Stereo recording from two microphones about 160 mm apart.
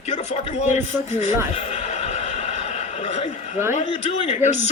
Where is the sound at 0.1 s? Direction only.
45° left (ahead or behind).